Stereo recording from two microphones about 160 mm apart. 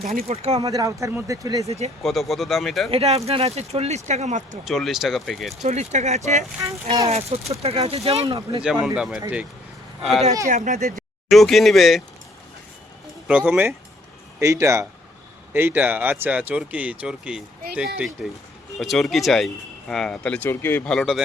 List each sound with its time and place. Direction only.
0.0 s speech: 65° right (ahead or behind)
0.3 s speech: 40° right (ahead or behind)
0.6 s speech: 20° right (ahead or behind)
1.6 s speech: 40° right (ahead or behind)
2.0 s speech: centre (ahead or behind)
2.9 s speech: 40° right (ahead or behind)
4.6 s speech: centre (ahead or behind)
5.6 s speech: 45° right (ahead or behind)
8.6 s speech: 5° right (ahead or behind)
10.5 s speech: 50° right (ahead or behind)
11.3 s speech: centre (ahead or behind)
13.2 s speech: 10° right (ahead or behind)